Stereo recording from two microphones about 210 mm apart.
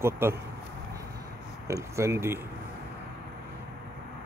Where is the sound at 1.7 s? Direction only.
15° right (ahead or behind).